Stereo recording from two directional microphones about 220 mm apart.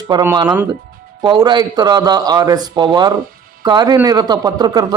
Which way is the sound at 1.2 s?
20° right (ahead or behind).